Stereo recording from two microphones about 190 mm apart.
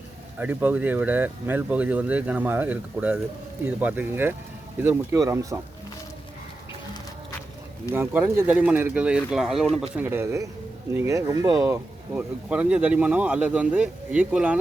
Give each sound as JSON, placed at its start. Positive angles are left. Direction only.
{"t": 0.3, "sound": "speech", "side_deg": -10}
{"t": 7.9, "sound": "speech", "side_deg": -10}